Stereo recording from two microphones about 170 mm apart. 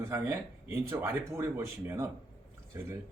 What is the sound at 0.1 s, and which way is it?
Speech, 15° right (ahead or behind).